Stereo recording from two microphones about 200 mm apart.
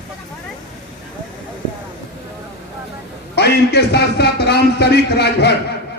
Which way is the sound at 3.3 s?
55° left (ahead or behind).